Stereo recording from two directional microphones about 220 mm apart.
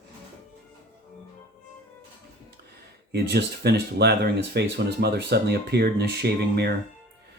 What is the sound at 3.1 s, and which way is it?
Speech, 45° right (ahead or behind).